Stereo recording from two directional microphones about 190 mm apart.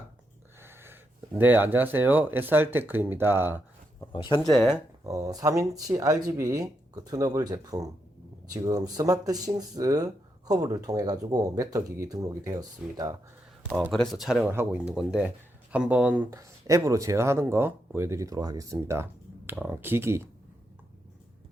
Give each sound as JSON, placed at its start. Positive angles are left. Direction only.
{"t": 0.6, "sound": "a sound", "side_deg": -10}
{"t": 1.4, "sound": "speech", "side_deg": -10}
{"t": 4.1, "sound": "speech", "side_deg": 25}
{"t": 4.5, "sound": "speech", "side_deg": 0}
{"t": 5.0, "sound": "speech", "side_deg": -15}
{"t": 13.9, "sound": "speech", "side_deg": 0}